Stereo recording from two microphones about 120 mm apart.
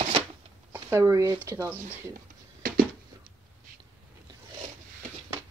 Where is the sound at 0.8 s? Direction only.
25° right (ahead or behind).